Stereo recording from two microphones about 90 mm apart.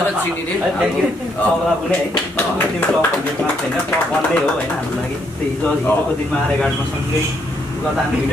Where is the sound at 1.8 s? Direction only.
20° left (ahead or behind).